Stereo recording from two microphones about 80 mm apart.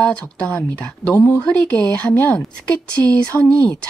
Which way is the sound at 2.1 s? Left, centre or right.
Left.